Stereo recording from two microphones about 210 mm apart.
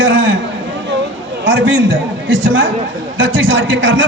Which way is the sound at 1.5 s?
60° right (ahead or behind).